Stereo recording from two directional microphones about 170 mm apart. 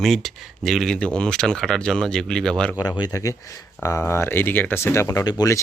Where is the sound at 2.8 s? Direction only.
20° left (ahead or behind).